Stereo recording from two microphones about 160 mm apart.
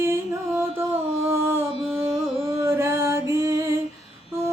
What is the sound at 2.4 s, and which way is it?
Music, 20° right (ahead or behind).